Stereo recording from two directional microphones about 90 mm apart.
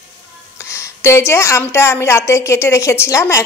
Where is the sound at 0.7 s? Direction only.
30° left (ahead or behind).